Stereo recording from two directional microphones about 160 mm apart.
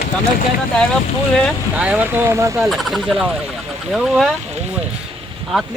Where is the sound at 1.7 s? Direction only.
5° right (ahead or behind).